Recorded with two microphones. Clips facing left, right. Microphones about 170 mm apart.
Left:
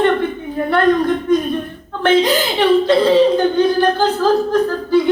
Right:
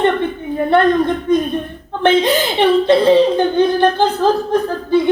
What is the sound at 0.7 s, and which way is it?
Speech, 20° right (ahead or behind).